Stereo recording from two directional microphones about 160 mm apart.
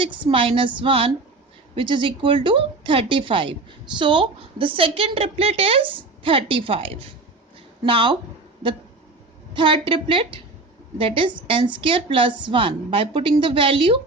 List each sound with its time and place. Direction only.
0.0 s a woman's voice: 30° right (ahead or behind)
9.6 s a woman's voice: 30° right (ahead or behind)